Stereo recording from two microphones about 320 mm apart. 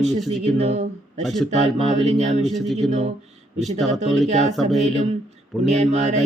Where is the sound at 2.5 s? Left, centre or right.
Centre.